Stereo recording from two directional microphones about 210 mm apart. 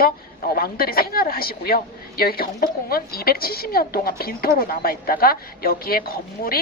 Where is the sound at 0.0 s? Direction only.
45° left (ahead or behind).